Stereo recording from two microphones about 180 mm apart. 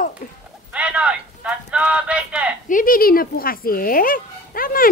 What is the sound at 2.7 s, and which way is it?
Dog, 50° left (ahead or behind).